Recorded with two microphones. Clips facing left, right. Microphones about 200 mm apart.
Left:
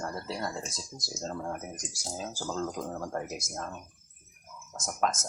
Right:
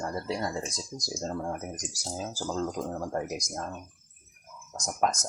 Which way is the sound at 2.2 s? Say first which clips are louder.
Right 2 dB; 5° right (ahead or behind).